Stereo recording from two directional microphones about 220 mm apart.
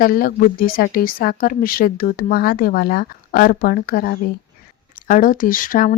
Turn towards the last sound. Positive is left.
turn(degrees=40)  # may be behind; listen again after turning